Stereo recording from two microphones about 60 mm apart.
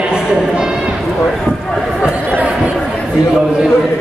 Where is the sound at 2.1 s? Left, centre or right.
Right.